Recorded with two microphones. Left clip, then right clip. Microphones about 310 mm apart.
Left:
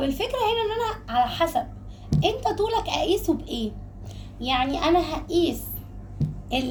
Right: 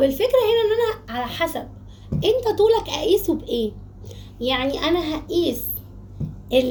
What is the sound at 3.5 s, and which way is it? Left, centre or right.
Speech, left.